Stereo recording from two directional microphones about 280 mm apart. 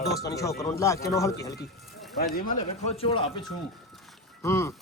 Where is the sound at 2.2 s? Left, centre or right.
Left.